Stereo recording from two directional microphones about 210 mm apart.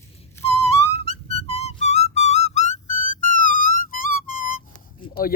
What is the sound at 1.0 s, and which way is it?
Music, 30° left (ahead or behind).